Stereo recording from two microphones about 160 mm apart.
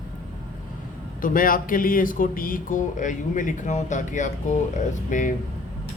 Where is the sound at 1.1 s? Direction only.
60° left (ahead or behind).